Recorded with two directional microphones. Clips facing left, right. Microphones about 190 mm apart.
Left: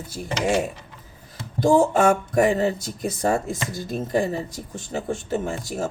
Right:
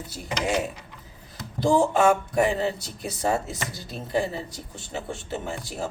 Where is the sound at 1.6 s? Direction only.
45° left (ahead or behind).